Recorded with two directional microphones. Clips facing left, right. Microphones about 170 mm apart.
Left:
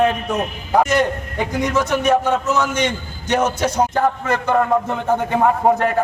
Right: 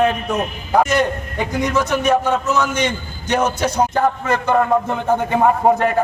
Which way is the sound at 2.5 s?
45° left (ahead or behind).